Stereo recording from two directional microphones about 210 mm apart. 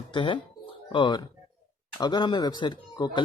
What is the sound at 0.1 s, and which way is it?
Speech, 25° left (ahead or behind).